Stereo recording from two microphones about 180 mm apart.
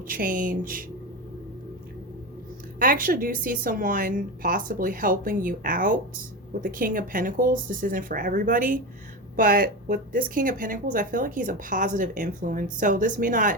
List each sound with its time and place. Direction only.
0.1 s speech: 50° right (ahead or behind)
2.7 s speech: 50° right (ahead or behind)